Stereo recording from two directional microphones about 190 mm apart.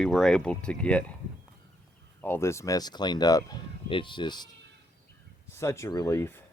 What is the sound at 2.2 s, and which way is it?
Speech, 10° left (ahead or behind).